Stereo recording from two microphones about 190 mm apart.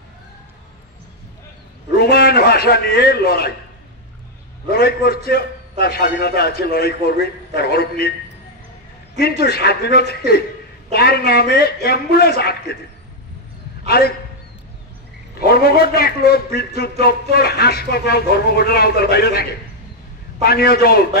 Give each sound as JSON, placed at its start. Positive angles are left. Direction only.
{"t": 2.0, "sound": "a man's voice", "side_deg": 55}
{"t": 4.6, "sound": "a man's voice", "side_deg": 55}
{"t": 9.2, "sound": "a man's voice", "side_deg": 55}
{"t": 13.8, "sound": "a man's voice", "side_deg": 55}
{"t": 15.3, "sound": "a man's voice", "side_deg": 55}
{"t": 20.4, "sound": "a man's voice", "side_deg": 55}